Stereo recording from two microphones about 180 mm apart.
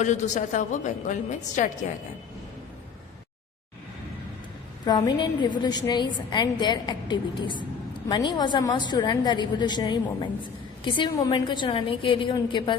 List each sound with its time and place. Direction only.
0.0 s a woman's voice: 40° left (ahead or behind)
4.9 s a woman's voice: 25° left (ahead or behind)